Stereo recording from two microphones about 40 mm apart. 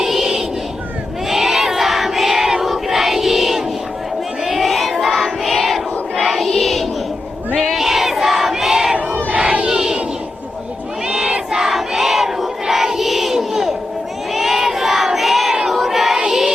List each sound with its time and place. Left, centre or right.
0.0 s a sound: centre
1.3 s crowd: centre
6.6 s a sound: centre
7.7 s battle cry: centre
9.6 s crowd: centre
11.1 s crowd: centre
16.2 s child singing: centre